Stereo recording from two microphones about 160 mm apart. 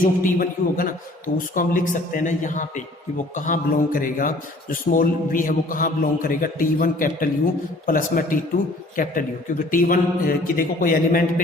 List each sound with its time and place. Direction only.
0.0 s a man's voice: 60° left (ahead or behind)